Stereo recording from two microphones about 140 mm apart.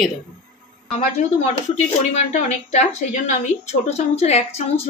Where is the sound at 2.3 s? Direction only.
55° left (ahead or behind).